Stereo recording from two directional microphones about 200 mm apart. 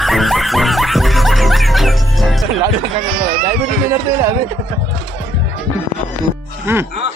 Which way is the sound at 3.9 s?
15° right (ahead or behind).